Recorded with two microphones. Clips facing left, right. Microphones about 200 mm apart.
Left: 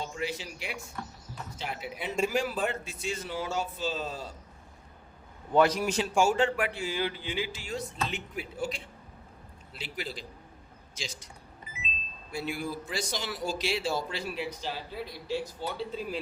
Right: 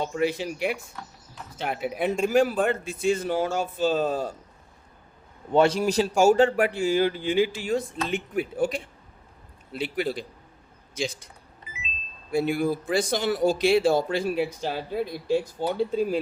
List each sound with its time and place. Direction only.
0.0 s a man's voice: 55° right (ahead or behind)
5.5 s a man's voice: 30° right (ahead or behind); by 11.3 s 55° right (ahead or behind)
12.3 s a man's voice: 55° right (ahead or behind)